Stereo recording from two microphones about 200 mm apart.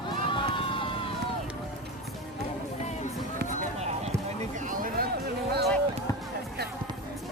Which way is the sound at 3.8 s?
30° right (ahead or behind).